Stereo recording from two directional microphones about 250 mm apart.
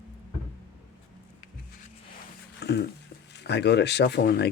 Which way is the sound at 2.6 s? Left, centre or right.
Left.